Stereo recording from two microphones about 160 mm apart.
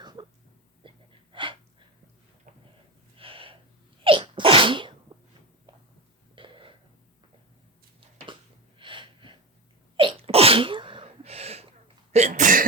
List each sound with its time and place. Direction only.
0.0 s a sound: 25° right (ahead or behind)
3.2 s gasp: 35° right (ahead or behind)
4.0 s sneeze: 30° right (ahead or behind)
6.3 s burping: 30° right (ahead or behind)
8.8 s gasp: 30° right (ahead or behind)
10.0 s sneeze: 35° right (ahead or behind)
12.1 s cough: 50° right (ahead or behind)